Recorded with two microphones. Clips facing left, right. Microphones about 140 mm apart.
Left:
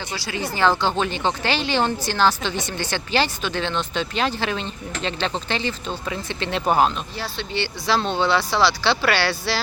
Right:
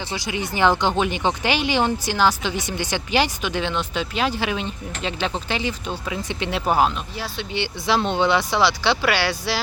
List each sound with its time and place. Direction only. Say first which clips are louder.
0.1 s speech: right 1 dB; 20° right (ahead or behind)